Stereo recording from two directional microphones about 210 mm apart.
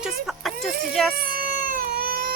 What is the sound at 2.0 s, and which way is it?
Baby cry, 45° right (ahead or behind).